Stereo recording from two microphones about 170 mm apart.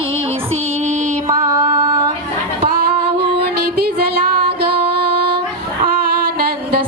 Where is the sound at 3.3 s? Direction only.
65° right (ahead or behind).